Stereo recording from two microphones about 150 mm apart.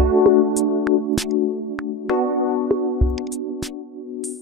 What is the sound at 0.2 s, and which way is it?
Music, centre (ahead or behind).